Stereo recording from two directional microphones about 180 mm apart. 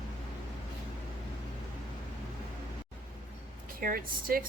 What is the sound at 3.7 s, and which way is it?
Speech, 50° right (ahead or behind).